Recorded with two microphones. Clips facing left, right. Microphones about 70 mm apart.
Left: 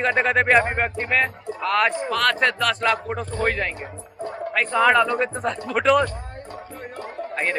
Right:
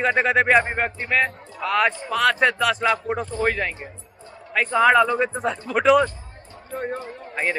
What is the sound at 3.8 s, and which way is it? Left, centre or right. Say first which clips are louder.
Music: left 7 dB; left.